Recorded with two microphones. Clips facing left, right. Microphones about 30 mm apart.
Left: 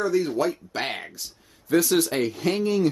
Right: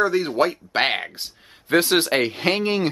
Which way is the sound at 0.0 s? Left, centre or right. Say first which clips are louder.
Right 3 dB; right.